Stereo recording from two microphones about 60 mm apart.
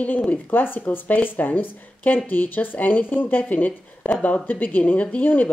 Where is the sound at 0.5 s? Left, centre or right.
Left.